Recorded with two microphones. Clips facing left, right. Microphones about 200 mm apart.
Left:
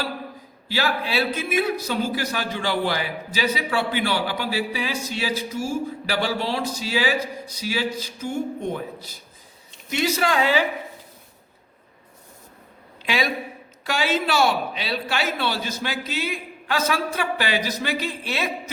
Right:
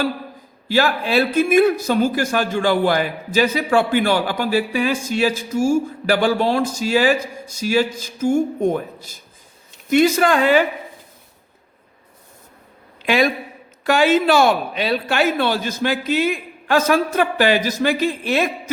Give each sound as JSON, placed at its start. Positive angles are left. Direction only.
{"t": 0.7, "sound": "a man's voice", "side_deg": -50}
{"t": 13.0, "sound": "a man's voice", "side_deg": -50}